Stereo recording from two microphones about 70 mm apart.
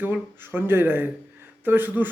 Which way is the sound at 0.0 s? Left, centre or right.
Right.